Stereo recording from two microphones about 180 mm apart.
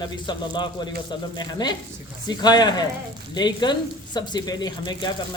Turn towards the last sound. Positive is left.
turn(degrees=25)  # may be behind; listen again after turning